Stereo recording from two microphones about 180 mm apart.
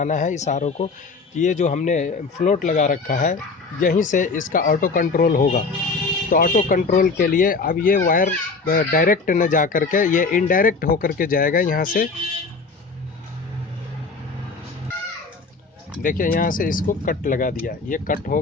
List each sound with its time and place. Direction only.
0.0 s speech: 45° left (ahead or behind)
16.0 s speech: 50° left (ahead or behind)